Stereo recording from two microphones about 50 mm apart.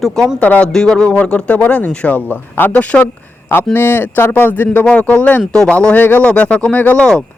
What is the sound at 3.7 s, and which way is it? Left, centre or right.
Speech, left.